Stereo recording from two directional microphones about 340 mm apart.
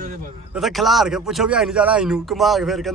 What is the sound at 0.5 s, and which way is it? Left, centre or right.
A man's voice, centre.